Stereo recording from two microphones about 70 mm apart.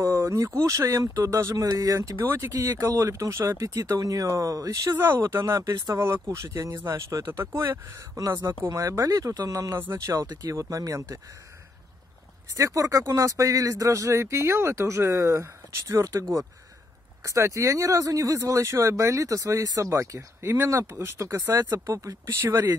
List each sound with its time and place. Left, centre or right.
0.1 s speech: right
4.9 s speech: right
5.2 s speech: right
5.9 s speech: right
10.2 s speech: right
10.5 s speech: right
12.5 s speech: right
17.2 s speech: right